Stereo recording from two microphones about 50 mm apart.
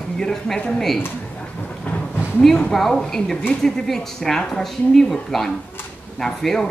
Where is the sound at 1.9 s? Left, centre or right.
Left.